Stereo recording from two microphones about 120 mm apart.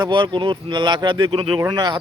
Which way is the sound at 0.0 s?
40° right (ahead or behind).